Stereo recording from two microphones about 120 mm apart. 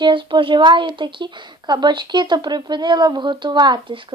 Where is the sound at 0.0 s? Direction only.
40° right (ahead or behind).